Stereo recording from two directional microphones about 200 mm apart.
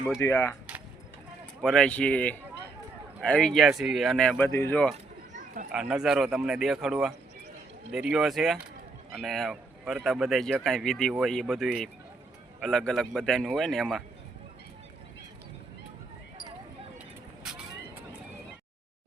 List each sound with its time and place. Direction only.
0.2 s speech: 15° left (ahead or behind)
1.6 s speech: 5° left (ahead or behind)
5.3 s chatter: 40° right (ahead or behind)
5.7 s speech: 5° right (ahead or behind)
17.5 s vehicle: centre (ahead or behind)